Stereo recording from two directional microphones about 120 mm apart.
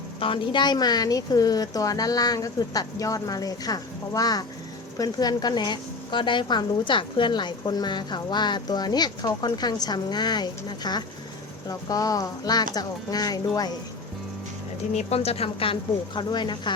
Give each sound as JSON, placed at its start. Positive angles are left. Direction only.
{"t": 0.2, "sound": "a woman's voice", "side_deg": 45}
{"t": 14.9, "sound": "a woman's voice", "side_deg": 60}